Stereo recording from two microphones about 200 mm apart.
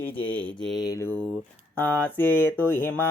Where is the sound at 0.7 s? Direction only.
15° left (ahead or behind).